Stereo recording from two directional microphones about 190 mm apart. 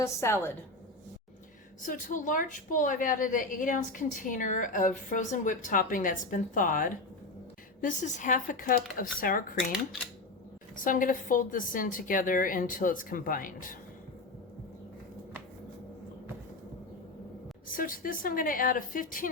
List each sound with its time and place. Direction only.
0.0 s a woman's voice: 15° left (ahead or behind)
1.8 s a woman's voice: 45° left (ahead or behind)
10.8 s a woman's voice: 45° left (ahead or behind)
17.7 s a woman's voice: 50° left (ahead or behind)